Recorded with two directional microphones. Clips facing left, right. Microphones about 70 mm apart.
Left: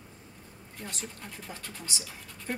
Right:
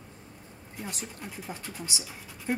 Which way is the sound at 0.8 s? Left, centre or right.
Centre.